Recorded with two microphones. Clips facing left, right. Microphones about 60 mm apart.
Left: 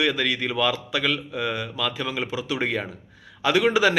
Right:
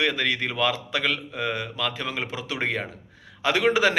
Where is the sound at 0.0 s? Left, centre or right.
Right.